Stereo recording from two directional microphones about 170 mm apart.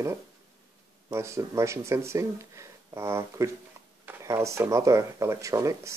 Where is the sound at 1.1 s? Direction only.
15° right (ahead or behind).